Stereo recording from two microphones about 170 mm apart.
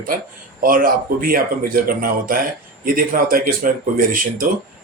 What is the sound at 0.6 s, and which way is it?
A man's voice, 55° right (ahead or behind).